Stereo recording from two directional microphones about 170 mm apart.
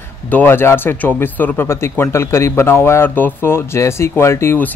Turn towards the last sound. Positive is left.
turn(degrees=15)  # may be behind; listen again after turning